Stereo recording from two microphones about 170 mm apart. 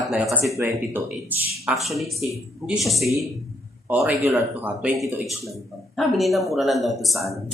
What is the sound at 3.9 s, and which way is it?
Speech, 10° right (ahead or behind).